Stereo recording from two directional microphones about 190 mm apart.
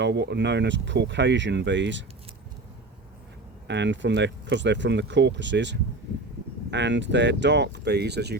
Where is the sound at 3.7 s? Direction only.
70° right (ahead or behind).